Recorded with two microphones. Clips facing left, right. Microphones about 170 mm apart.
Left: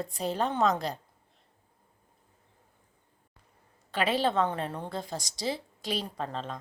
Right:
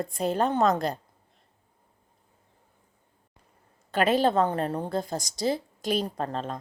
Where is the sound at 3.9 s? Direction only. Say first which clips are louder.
Right 5 dB; 45° right (ahead or behind).